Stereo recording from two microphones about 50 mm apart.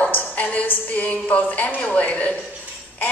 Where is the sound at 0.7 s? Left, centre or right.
Left.